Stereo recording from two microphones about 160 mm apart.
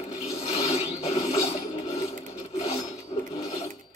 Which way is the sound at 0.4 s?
40° left (ahead or behind).